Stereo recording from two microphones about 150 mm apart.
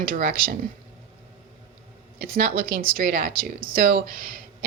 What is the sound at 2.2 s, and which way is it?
Speech, 90° right.